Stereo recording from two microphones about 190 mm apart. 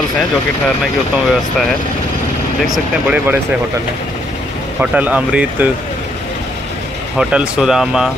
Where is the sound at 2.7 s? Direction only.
5° right (ahead or behind).